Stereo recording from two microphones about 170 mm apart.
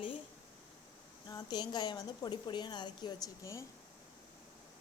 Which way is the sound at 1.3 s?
25° left (ahead or behind).